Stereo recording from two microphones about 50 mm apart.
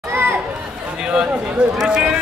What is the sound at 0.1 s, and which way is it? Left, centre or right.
Chatter, right.